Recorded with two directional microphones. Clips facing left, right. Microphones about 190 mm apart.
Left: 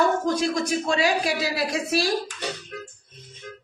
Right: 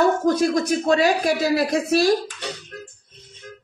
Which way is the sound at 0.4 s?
50° right (ahead or behind).